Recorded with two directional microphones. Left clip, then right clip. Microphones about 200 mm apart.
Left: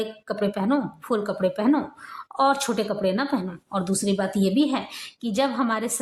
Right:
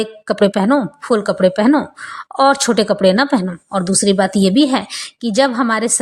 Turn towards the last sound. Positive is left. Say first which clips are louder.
# right 9 dB
turn(degrees=-25)  # may be behind; listen again after turning